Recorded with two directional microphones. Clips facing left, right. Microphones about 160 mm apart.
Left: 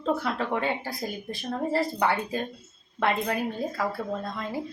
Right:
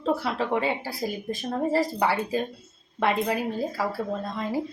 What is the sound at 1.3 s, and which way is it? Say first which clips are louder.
Speech: right 2 dB; 45° right (ahead or behind).